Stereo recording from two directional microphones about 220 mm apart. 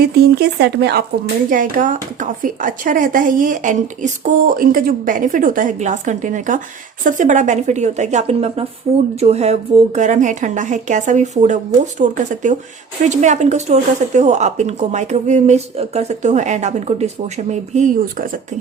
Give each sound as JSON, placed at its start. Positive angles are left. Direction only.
{"t": 0.0, "sound": "speech", "side_deg": -45}
{"t": 1.5, "sound": "a woman's voice", "side_deg": -35}